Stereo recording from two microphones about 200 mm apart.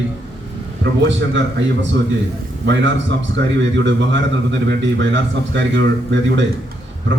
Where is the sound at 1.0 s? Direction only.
65° right (ahead or behind).